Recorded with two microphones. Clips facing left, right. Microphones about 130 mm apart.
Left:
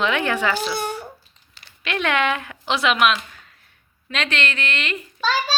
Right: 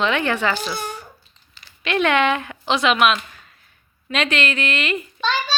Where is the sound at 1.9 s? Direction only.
Centre (ahead or behind).